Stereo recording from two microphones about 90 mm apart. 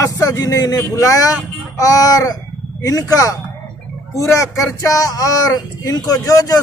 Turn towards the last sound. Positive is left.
turn(degrees=40)  # may be behind; listen again after turning